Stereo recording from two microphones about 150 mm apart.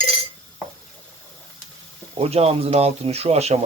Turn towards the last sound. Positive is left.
turn(degrees=-45)  # may be behind; listen again after turning